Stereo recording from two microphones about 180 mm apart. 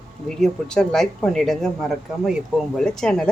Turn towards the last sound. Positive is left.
turn(degrees=0)  # may be behind; listen again after turning